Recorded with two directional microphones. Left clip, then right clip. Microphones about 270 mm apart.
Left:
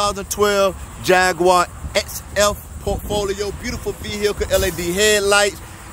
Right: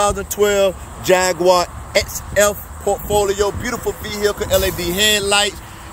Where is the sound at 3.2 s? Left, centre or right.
Centre.